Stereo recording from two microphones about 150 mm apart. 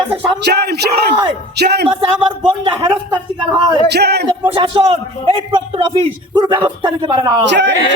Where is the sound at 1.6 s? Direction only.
90° right.